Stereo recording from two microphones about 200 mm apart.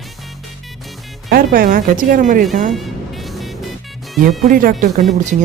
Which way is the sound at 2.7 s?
Centre (ahead or behind).